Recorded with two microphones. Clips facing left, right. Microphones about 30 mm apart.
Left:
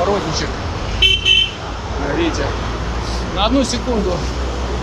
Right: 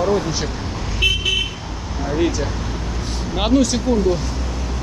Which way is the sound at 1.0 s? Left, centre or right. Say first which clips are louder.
Left 5 dB; left.